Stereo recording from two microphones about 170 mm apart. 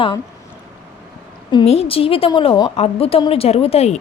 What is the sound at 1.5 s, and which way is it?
A woman's voice, 35° left (ahead or behind).